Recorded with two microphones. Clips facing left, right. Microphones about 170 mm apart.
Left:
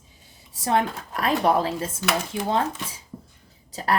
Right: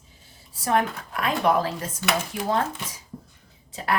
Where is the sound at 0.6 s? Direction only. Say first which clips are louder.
Even; 30° left (ahead or behind).